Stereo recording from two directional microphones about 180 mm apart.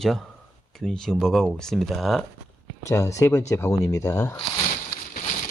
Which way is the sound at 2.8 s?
15° left (ahead or behind).